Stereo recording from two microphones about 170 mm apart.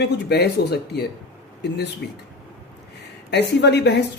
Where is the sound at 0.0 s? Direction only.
75° left (ahead or behind).